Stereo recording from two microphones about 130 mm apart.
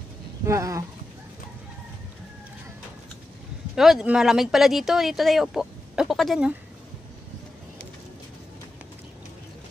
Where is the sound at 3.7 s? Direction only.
Centre (ahead or behind).